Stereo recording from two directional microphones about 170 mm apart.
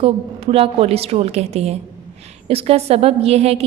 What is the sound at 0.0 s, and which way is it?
A woman's voice, 35° right (ahead or behind).